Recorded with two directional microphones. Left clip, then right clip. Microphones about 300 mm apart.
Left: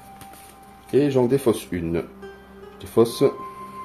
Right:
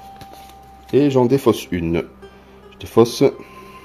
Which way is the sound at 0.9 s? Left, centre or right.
Right.